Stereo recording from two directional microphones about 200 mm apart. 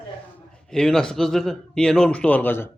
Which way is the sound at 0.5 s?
5° left (ahead or behind).